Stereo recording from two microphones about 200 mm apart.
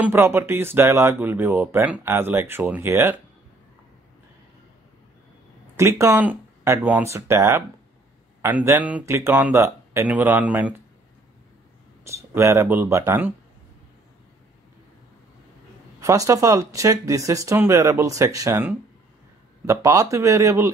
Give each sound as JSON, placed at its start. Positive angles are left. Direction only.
{"t": 0.0, "sound": "speech", "side_deg": -10}
{"t": 5.8, "sound": "speech", "side_deg": -15}
{"t": 12.1, "sound": "speech", "side_deg": -15}
{"t": 16.0, "sound": "speech", "side_deg": -15}